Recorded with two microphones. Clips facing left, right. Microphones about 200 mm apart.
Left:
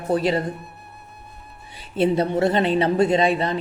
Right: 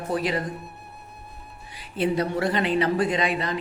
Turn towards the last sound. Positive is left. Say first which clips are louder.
# left 6 dB
turn(degrees=30)  # may be behind; listen again after turning